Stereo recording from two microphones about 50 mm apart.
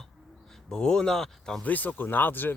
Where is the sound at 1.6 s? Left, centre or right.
Left.